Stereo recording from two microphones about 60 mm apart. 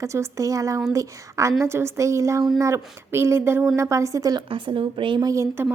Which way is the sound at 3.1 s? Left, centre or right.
Right.